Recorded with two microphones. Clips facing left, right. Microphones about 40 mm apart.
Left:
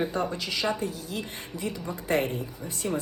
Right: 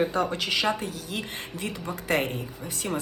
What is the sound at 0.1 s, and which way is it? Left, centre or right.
A woman's voice, right.